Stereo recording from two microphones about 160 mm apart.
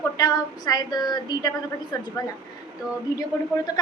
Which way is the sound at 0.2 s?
25° left (ahead or behind).